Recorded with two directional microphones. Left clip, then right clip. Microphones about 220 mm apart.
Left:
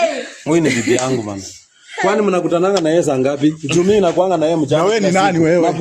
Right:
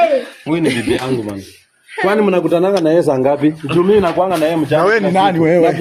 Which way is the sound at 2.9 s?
20° left (ahead or behind).